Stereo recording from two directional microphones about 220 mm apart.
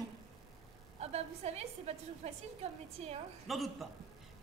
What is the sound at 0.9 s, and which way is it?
A woman's voice, 30° right (ahead or behind).